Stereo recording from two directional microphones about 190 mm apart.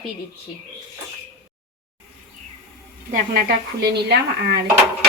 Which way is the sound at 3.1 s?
55° right (ahead or behind).